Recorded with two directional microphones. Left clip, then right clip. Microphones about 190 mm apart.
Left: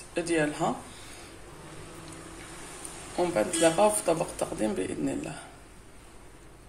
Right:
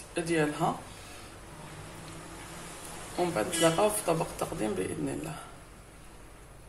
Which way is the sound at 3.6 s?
15° left (ahead or behind).